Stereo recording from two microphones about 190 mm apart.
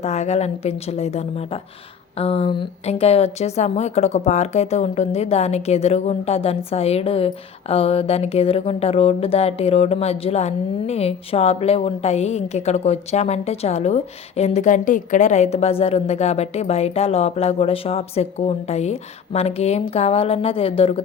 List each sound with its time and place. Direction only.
0.0 s speech: 35° left (ahead or behind)